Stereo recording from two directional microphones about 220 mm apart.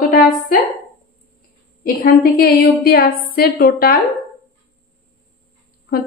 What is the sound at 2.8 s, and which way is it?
A woman's voice, 40° left (ahead or behind).